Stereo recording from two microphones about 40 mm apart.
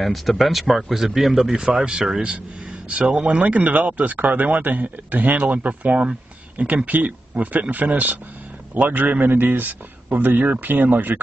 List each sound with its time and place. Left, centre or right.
0.0 s speech: centre
1.8 s speech: right
6.6 s speech: right